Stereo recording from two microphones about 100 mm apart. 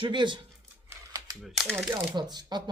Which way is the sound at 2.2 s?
45° right (ahead or behind).